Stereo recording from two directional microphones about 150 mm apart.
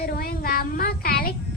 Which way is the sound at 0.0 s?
90° left.